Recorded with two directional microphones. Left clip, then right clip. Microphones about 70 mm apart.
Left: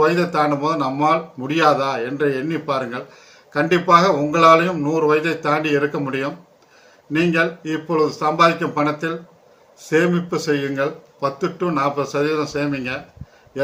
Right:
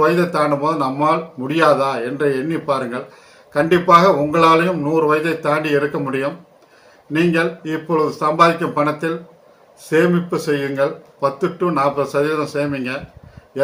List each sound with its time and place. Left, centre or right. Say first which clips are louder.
0.0 s speech: right 1 dB; left